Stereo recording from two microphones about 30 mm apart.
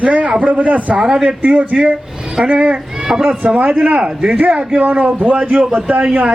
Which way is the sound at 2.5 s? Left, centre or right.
Right.